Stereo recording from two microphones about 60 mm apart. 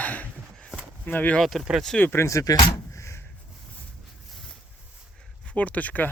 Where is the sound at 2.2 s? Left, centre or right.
Left.